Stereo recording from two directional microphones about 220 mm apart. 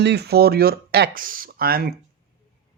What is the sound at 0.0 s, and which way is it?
Speech, 50° right (ahead or behind).